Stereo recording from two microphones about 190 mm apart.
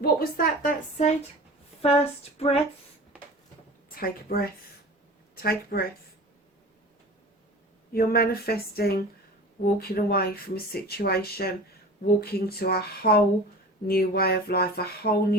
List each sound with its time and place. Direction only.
0.0 s a woman's voice: 50° left (ahead or behind)
1.8 s a sound: 30° left (ahead or behind)
3.8 s a woman's voice: 50° left (ahead or behind)
7.9 s speech: 50° left (ahead or behind)